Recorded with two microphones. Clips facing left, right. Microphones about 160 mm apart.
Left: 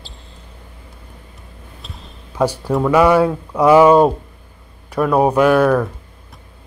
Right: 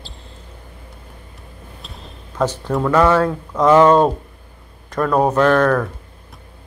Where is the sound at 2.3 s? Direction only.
10° left (ahead or behind).